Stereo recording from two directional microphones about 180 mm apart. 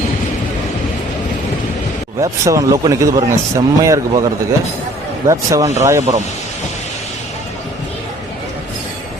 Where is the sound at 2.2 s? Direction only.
20° right (ahead or behind).